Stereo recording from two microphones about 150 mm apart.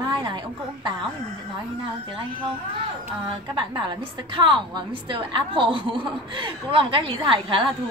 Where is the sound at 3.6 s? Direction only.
30° right (ahead or behind).